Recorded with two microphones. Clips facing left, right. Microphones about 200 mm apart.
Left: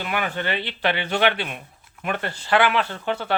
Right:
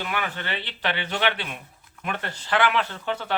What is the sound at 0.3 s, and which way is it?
Speech, 15° left (ahead or behind).